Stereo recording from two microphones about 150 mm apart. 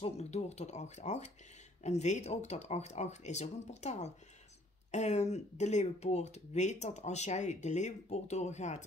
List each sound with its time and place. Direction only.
0.0 s speech: 45° left (ahead or behind)